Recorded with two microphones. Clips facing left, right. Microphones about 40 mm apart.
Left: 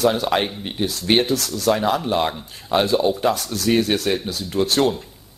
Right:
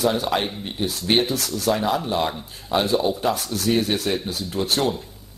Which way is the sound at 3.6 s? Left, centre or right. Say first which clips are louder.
Left 3 dB; left.